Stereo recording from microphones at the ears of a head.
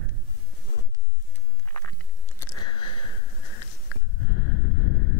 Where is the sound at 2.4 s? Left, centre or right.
Left.